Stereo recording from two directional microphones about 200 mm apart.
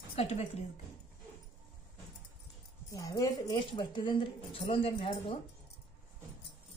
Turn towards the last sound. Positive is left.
turn(degrees=30)  # may be behind; listen again after turning